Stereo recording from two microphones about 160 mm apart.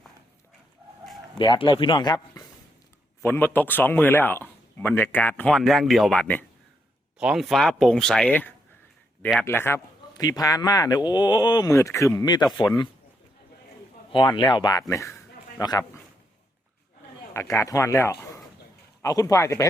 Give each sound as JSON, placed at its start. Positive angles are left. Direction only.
{"t": 1.4, "sound": "speech", "side_deg": 30}
{"t": 3.2, "sound": "speech", "side_deg": 15}
{"t": 7.2, "sound": "a man's voice", "side_deg": -5}
{"t": 14.1, "sound": "a man's voice", "side_deg": 30}
{"t": 17.3, "sound": "a man's voice", "side_deg": 20}